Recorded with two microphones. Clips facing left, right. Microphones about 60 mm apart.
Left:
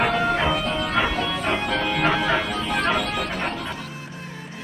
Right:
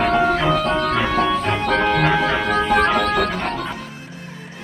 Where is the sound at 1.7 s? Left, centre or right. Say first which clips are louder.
Right 6 dB; right.